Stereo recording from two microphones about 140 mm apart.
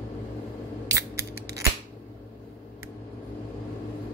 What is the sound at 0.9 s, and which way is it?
Scissors, 20° right (ahead or behind).